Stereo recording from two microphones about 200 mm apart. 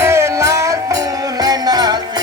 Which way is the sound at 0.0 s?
15° right (ahead or behind).